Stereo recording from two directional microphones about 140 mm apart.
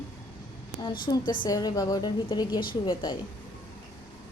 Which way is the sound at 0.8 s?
30° left (ahead or behind).